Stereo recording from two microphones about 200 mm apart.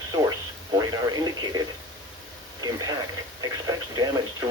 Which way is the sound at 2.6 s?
20° right (ahead or behind).